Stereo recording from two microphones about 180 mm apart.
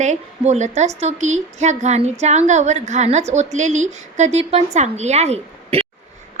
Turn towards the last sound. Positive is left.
turn(degrees=-35)  # may be behind; listen again after turning